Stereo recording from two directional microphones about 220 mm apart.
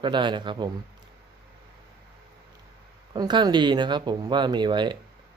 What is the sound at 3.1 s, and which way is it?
Speech, 20° right (ahead or behind).